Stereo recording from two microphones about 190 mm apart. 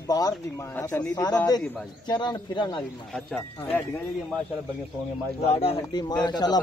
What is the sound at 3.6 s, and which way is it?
Speech, 10° left (ahead or behind).